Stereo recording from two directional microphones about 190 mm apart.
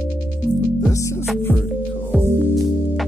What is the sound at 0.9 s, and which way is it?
Music, 15° left (ahead or behind).